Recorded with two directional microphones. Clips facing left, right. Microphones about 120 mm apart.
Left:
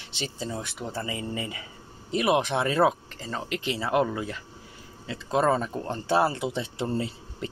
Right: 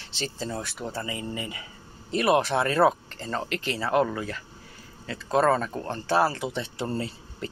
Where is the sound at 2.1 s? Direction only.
15° left (ahead or behind).